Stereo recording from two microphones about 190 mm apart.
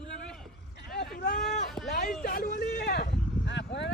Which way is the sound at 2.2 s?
50° left (ahead or behind).